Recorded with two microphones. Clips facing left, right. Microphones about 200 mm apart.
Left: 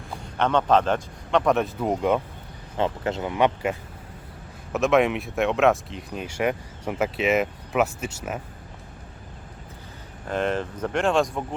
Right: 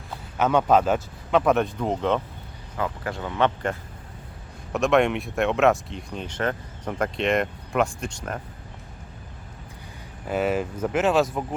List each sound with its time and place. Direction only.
0.3 s speech: 10° right (ahead or behind); by 2.2 s 10° left (ahead or behind)
2.7 s speech: 25° left (ahead or behind); by 8.4 s 5° left (ahead or behind)
10.2 s speech: 5° right (ahead or behind)